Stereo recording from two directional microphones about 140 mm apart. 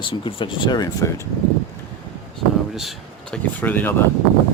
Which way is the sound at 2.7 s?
5° left (ahead or behind).